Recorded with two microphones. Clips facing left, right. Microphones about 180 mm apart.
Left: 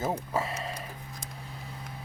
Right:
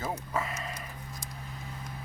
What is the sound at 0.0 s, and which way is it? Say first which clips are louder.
Speech: left 3 dB; 30° left (ahead or behind).